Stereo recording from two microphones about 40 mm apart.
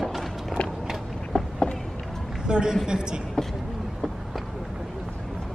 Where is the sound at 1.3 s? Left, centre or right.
Left.